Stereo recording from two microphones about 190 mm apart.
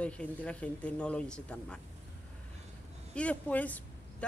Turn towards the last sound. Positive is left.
turn(degrees=10)  # may be behind; listen again after turning